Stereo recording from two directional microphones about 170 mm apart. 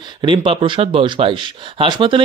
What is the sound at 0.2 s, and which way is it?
Speech, 30° right (ahead or behind).